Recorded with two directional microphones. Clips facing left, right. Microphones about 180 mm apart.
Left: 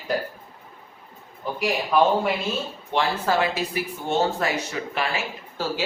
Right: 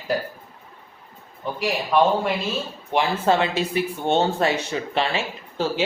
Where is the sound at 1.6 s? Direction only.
Centre (ahead or behind).